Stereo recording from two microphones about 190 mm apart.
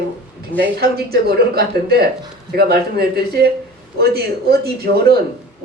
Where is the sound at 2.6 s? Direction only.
55° right (ahead or behind).